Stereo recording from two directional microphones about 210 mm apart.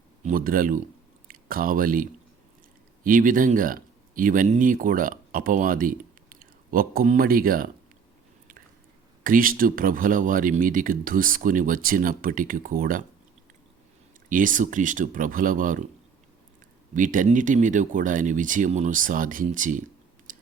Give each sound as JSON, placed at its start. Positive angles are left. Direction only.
{"t": 0.3, "sound": "speech", "side_deg": -40}
{"t": 9.2, "sound": "speech", "side_deg": -40}
{"t": 14.3, "sound": "speech", "side_deg": -40}
{"t": 16.9, "sound": "speech", "side_deg": -40}
{"t": 20.3, "sound": "chewing", "side_deg": -40}